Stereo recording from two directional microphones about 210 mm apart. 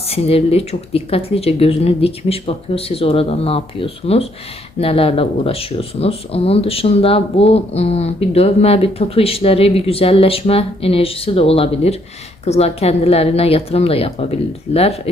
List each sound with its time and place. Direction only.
0.1 s speech: 30° left (ahead or behind)